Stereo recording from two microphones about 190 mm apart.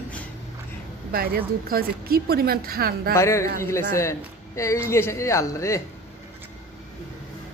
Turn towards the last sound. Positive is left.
turn(degrees=15)  # may be behind; listen again after turning